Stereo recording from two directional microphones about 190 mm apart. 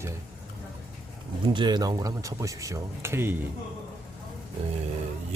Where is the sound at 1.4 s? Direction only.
25° right (ahead or behind).